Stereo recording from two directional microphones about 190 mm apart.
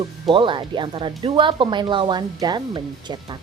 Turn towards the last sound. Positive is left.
turn(degrees=-25)  # may be behind; listen again after turning